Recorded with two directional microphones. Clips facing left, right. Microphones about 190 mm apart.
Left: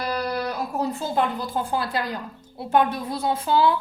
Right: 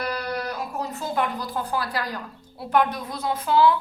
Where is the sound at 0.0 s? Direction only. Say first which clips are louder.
Left 2 dB; 30° left (ahead or behind).